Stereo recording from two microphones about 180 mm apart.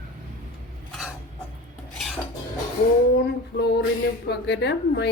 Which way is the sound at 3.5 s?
65° left (ahead or behind).